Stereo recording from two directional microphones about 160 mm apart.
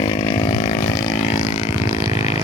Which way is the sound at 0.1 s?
35° left (ahead or behind).